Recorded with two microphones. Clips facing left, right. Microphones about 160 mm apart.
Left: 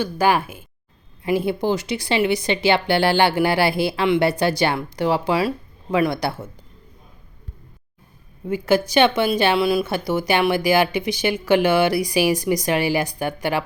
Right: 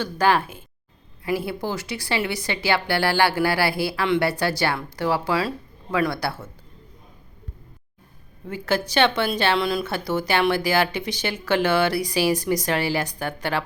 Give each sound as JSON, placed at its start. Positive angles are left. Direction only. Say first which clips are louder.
{"t": 0.0, "sound": "a woman's voice", "louder": "left 2 dB", "side_deg": 10}
{"t": 8.4, "sound": "speech", "louder": "left 6 dB", "side_deg": 15}